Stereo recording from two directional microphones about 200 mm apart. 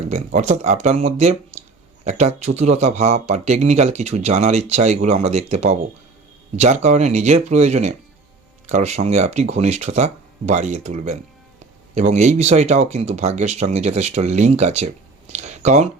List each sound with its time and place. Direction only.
0.3 s speech: 35° right (ahead or behind)